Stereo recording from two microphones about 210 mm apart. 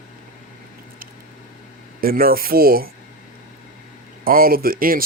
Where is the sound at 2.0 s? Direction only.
45° right (ahead or behind).